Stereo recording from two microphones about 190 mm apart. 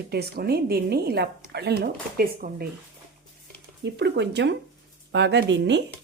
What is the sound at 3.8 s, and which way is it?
Speech, 65° right (ahead or behind).